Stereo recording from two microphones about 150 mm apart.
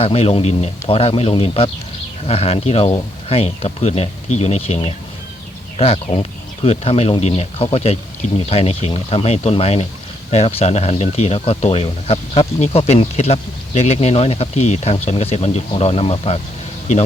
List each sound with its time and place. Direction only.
0.0 s speech: 40° left (ahead or behind)
5.7 s speech: 40° left (ahead or behind)